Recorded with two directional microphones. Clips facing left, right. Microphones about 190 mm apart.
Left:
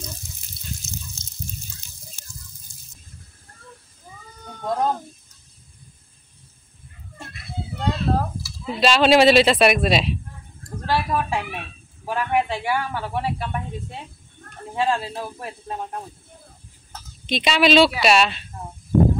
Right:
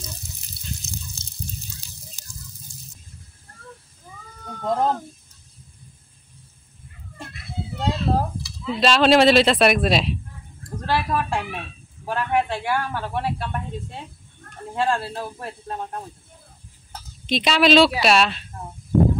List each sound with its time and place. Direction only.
1.8 s water: 35° right (ahead or behind)
4.5 s cat: centre (ahead or behind)
7.8 s a sound: 10° right (ahead or behind)
8.7 s speech: centre (ahead or behind)
10.9 s speech: 10° left (ahead or behind)
14.8 s speech: 15° left (ahead or behind)
17.3 s speech: centre (ahead or behind)